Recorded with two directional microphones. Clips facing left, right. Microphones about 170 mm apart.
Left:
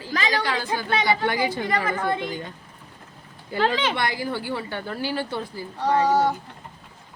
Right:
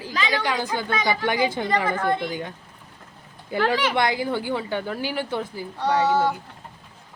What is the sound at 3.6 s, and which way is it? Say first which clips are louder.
Speech: even; 20° left (ahead or behind).